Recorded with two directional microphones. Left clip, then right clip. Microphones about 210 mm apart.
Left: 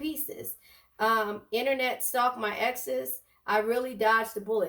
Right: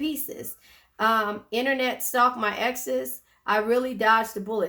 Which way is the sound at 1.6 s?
30° right (ahead or behind).